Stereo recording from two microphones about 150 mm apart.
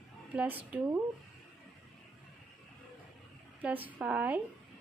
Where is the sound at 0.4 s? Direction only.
10° right (ahead or behind).